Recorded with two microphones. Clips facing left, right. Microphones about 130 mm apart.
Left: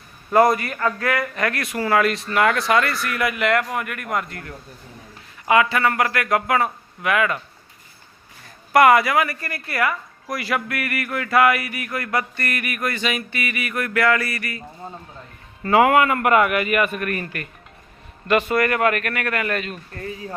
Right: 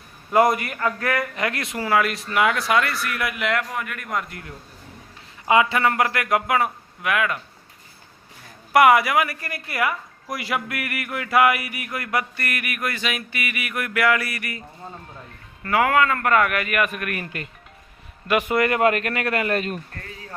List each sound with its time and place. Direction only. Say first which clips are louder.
0.3 s speech: left 2 dB; 15° right (ahead or behind)
1.8 s speech: left 2 dB; 5° right (ahead or behind)
4.3 s speech: left 3 dB; 10° right (ahead or behind)
8.7 s speech: left 1 dB; 10° right (ahead or behind)
15.6 s a man's voice: left 4 dB; 20° left (ahead or behind); by 17.2 s 5° right (ahead or behind)
17.2 s speech: left 1 dB; 20° right (ahead or behind); by 19.8 s 35° right (ahead or behind)
20.0 s a man's voice: left 8 dB; 15° left (ahead or behind)